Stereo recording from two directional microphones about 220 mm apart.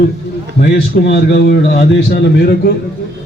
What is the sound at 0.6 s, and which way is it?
Speech, 50° left (ahead or behind).